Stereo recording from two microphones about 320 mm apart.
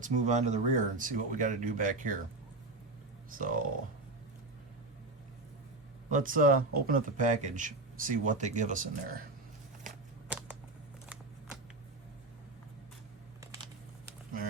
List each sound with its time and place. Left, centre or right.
0.0 s speech: right
3.2 s speech: right
6.1 s speech: right
10.2 s a sound: centre